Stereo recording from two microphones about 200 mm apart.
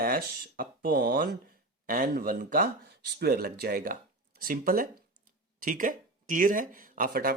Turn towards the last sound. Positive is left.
turn(degrees=-45)  # may be behind; listen again after turning